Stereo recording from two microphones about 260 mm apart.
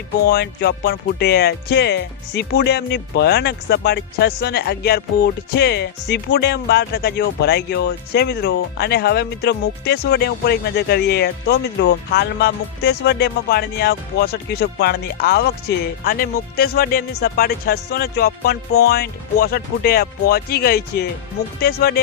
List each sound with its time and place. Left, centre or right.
0.3 s speech: left